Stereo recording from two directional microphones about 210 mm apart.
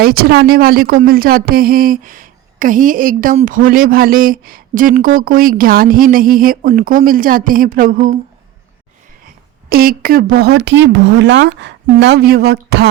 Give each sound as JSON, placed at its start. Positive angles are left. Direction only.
{"t": 0.0, "sound": "speech", "side_deg": -45}
{"t": 9.2, "sound": "a woman's voice", "side_deg": -45}